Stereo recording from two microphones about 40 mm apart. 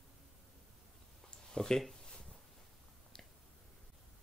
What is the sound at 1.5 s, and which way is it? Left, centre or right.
Speech, centre.